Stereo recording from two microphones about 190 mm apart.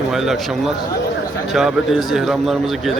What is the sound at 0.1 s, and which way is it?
A man's voice, centre (ahead or behind).